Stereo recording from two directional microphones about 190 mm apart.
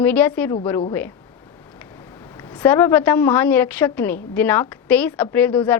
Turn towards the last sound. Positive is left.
turn(degrees=10)  # may be behind; listen again after turning